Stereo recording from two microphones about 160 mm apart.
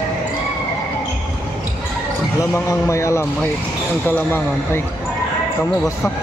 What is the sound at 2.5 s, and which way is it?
A man's voice, 20° left (ahead or behind).